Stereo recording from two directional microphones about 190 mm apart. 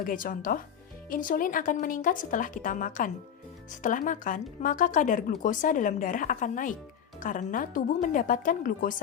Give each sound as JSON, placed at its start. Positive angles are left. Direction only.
{"t": 0.0, "sound": "speech", "side_deg": 45}